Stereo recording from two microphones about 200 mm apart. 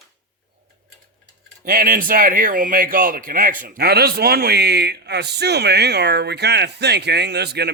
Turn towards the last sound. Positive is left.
turn(degrees=-55)  # may be behind; listen again after turning